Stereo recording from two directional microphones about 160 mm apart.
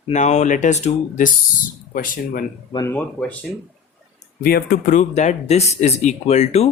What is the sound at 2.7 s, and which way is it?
Speech, 15° left (ahead or behind).